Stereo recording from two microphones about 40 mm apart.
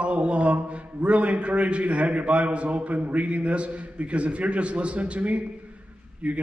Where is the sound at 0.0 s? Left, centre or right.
Right.